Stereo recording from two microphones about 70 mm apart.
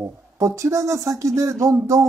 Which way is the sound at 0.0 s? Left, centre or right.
Right.